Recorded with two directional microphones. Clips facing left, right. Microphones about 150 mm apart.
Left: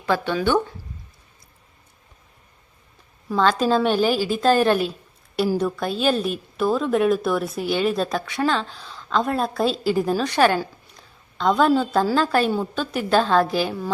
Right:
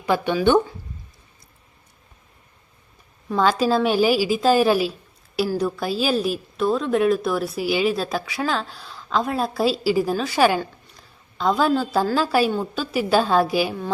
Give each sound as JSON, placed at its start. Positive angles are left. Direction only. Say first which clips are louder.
{"t": 0.0, "sound": "a woman's voice", "louder": "right 2 dB", "side_deg": -15}
{"t": 3.3, "sound": "a woman's voice", "louder": "even", "side_deg": -5}
{"t": 10.6, "sound": "a sound", "louder": "left 1 dB", "side_deg": 0}
{"t": 12.1, "sound": "a woman's voice", "louder": "even", "side_deg": -5}